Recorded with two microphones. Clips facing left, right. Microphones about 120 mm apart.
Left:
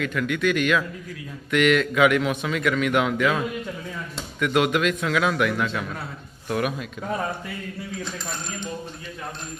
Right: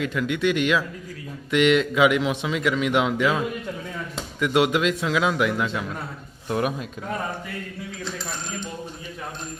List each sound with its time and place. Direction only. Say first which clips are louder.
0.0 s speech: right 1 dB; 25° right (ahead or behind)
6.5 s speech: right 1 dB; 30° right (ahead or behind)